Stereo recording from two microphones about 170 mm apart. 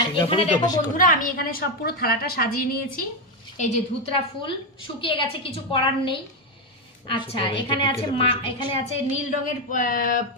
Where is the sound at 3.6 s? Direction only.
45° left (ahead or behind).